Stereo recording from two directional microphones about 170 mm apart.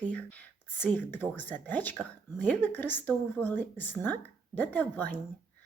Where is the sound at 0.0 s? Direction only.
10° left (ahead or behind).